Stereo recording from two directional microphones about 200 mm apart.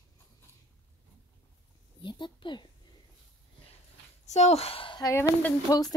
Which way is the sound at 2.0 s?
25° left (ahead or behind).